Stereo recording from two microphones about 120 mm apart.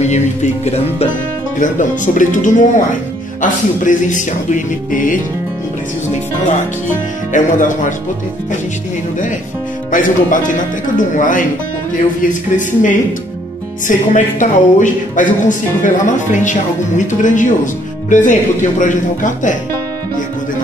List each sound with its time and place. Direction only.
0.0 s speech: 70° left (ahead or behind)
1.6 s speech: 90° left
7.3 s speech: 90° left
9.8 s speech: 90° left